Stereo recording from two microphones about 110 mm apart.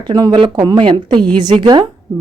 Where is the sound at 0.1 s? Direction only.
35° right (ahead or behind).